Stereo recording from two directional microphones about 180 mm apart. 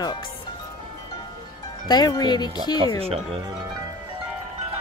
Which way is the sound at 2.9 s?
35° right (ahead or behind).